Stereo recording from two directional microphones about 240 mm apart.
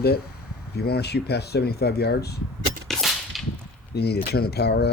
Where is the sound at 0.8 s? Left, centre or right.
Left.